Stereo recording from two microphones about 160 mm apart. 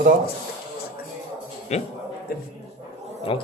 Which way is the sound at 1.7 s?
45° left (ahead or behind).